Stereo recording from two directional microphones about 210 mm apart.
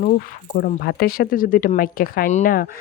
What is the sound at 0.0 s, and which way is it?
Speech, 40° left (ahead or behind).